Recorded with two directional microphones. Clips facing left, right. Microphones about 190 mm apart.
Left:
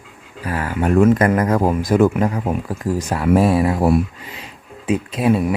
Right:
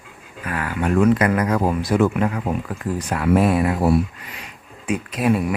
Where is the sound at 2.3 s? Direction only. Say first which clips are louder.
Left 2 dB; 30° left (ahead or behind).